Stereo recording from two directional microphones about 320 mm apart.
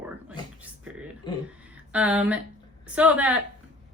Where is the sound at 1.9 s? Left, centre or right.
Centre.